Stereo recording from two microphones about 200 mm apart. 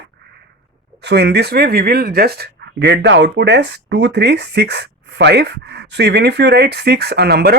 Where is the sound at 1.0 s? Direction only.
55° right (ahead or behind).